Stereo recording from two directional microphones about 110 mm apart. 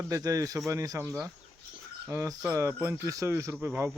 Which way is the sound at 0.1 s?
30° right (ahead or behind).